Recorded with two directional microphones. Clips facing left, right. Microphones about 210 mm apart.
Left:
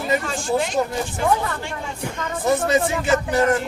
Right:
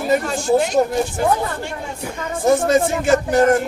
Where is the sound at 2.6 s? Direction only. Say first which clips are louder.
Right 4 dB; 45° right (ahead or behind).